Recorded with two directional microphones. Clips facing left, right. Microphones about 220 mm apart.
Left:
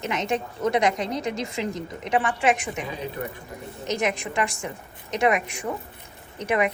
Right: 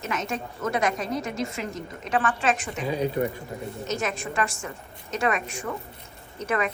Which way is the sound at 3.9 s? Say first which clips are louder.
Left 4 dB; 15° left (ahead or behind).